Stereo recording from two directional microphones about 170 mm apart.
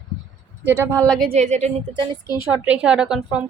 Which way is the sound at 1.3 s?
40° right (ahead or behind).